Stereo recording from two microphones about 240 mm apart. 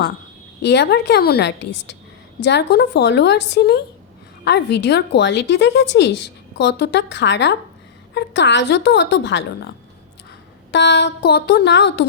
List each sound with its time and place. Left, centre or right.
0.6 s a woman's voice: left
10.7 s a woman's voice: left